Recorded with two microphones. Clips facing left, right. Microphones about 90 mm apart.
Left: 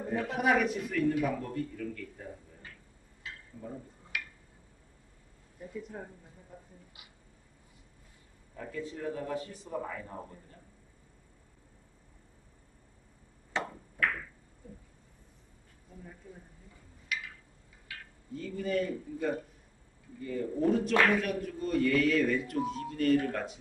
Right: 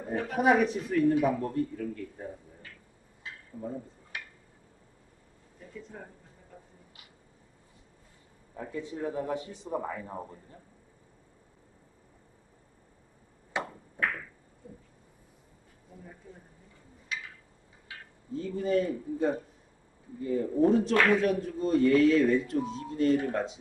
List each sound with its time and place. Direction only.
0.4 s speech: 35° right (ahead or behind)
3.6 s speech: 20° right (ahead or behind)
4.1 s a sound: 25° right (ahead or behind)
5.6 s speech: 15° left (ahead or behind)
8.5 s speech: 20° right (ahead or behind)
13.5 s a sound: 10° right (ahead or behind)
14.0 s a sound: 25° right (ahead or behind)
15.9 s speech: 15° right (ahead or behind)
17.8 s speech: 25° right (ahead or behind)